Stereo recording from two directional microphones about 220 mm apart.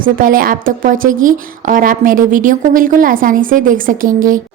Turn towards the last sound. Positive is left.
turn(degrees=-40)  # may be behind; listen again after turning